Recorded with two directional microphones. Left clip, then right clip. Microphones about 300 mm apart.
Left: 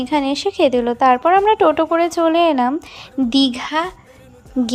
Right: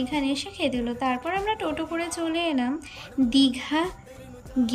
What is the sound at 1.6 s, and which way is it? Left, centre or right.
Speech, left.